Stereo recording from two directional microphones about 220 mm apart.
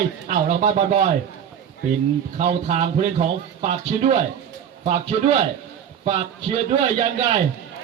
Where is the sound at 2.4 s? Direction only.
30° right (ahead or behind).